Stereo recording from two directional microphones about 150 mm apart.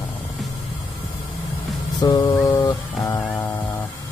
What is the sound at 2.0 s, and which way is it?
Mantra, 25° left (ahead or behind).